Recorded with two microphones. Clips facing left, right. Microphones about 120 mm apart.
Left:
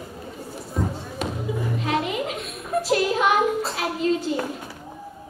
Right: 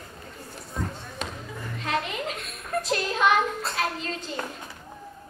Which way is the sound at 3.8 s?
15° left (ahead or behind).